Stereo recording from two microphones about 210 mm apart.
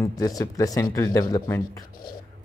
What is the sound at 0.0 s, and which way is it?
Speech, 15° left (ahead or behind).